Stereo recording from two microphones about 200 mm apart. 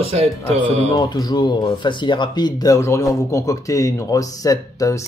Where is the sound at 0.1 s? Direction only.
30° right (ahead or behind).